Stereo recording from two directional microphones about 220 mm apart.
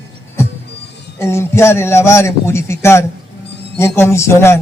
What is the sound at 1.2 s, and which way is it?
A man's voice, 10° left (ahead or behind).